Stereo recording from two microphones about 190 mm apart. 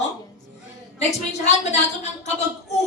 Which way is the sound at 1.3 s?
35° left (ahead or behind).